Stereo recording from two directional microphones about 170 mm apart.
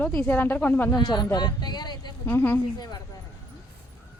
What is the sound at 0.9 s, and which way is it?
Speech, 25° left (ahead or behind).